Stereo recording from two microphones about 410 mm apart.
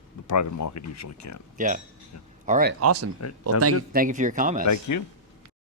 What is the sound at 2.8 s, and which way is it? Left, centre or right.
Speech, right.